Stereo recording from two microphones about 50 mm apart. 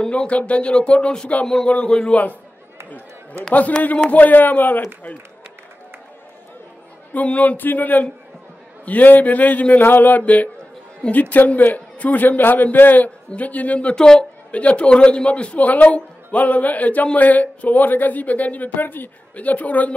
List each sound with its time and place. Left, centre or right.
0.0 s speech: left
4.0 s a man's voice: left
7.2 s a man's voice: left; by 14.2 s centre
14.5 s a man's voice: left